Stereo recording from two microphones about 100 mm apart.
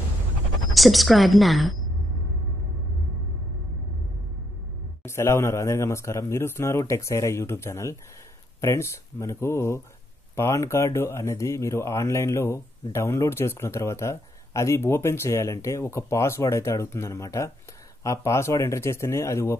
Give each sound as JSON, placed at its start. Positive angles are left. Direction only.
{"t": 0.7, "sound": "a woman's voice", "side_deg": 0}
{"t": 5.0, "sound": "speech", "side_deg": 25}